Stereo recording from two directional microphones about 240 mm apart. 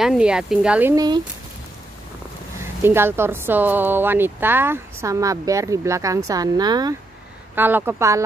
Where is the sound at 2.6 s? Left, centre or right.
Centre.